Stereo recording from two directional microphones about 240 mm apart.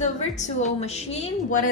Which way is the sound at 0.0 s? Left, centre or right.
Left.